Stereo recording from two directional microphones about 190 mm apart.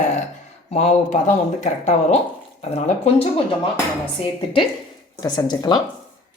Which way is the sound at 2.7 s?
30° left (ahead or behind).